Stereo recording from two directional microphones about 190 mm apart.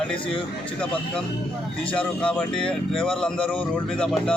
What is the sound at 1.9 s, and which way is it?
A man's voice, 5° left (ahead or behind).